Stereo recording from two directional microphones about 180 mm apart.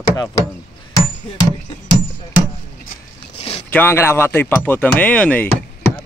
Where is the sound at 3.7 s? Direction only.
10° left (ahead or behind).